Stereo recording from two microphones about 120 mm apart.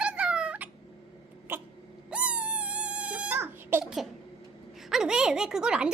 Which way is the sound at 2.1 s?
10° right (ahead or behind).